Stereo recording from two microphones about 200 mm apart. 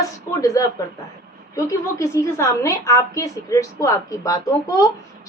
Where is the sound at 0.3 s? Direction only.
15° left (ahead or behind).